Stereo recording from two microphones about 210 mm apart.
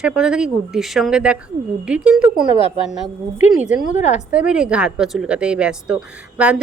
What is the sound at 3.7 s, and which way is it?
Speech, 35° left (ahead or behind).